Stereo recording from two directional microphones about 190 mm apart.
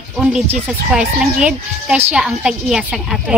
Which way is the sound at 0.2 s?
5° right (ahead or behind).